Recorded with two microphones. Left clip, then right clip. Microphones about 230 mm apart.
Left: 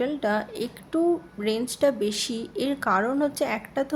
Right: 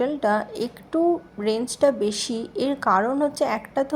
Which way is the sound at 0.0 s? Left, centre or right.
Centre.